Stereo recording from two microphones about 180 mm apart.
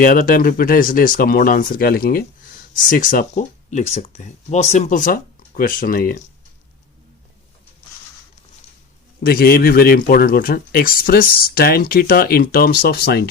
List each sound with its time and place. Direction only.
0.0 s speech: 50° left (ahead or behind)
9.2 s speech: 55° left (ahead or behind)